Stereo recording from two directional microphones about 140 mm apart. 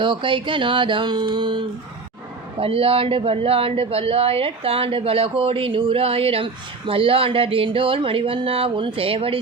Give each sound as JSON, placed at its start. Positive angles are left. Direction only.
{"t": 0.0, "sound": "speech", "side_deg": -35}